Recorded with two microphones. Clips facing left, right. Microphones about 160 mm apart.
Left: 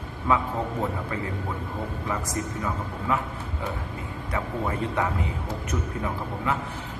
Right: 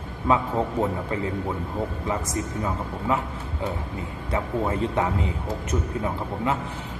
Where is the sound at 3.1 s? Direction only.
20° right (ahead or behind).